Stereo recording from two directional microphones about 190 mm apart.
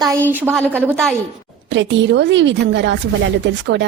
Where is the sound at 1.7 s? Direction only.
70° right (ahead or behind).